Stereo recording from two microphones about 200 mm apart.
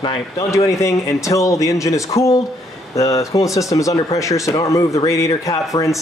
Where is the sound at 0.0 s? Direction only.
20° left (ahead or behind).